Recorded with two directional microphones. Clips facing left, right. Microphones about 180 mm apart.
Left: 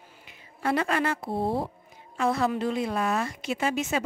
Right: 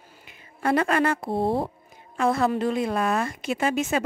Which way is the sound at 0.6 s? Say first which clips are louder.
Right 4 dB; 50° right (ahead or behind).